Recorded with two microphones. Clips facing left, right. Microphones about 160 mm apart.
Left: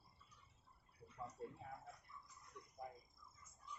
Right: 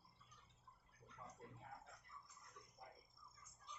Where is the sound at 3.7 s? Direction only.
85° right.